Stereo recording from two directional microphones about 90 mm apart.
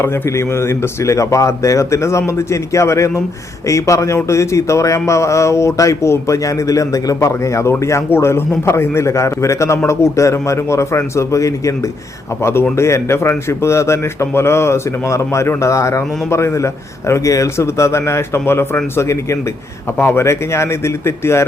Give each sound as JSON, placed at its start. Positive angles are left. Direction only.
{"t": 0.0, "sound": "a man's voice", "side_deg": 30}